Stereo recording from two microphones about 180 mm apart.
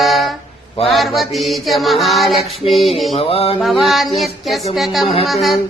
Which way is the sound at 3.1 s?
30° left (ahead or behind).